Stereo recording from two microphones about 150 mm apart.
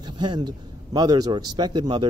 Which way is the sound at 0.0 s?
30° right (ahead or behind).